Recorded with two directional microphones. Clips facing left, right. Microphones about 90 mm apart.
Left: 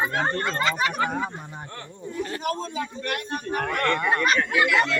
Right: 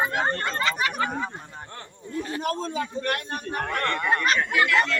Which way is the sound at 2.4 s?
45° right (ahead or behind).